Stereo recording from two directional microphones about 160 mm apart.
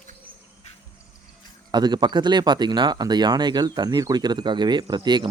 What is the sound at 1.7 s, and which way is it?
Speech, 25° right (ahead or behind).